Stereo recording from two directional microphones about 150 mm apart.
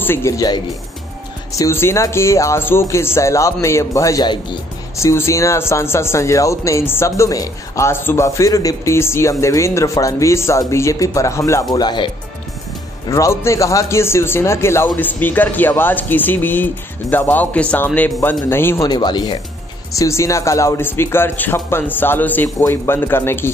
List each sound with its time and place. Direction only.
0.0 s speech: 15° left (ahead or behind)
4.9 s speech: 20° left (ahead or behind)
13.1 s speech: 20° left (ahead or behind)
18.9 s speech: 30° left (ahead or behind)
19.9 s speech: 20° left (ahead or behind)